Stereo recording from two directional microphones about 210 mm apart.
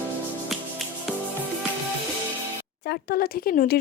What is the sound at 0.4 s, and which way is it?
Music, centre (ahead or behind).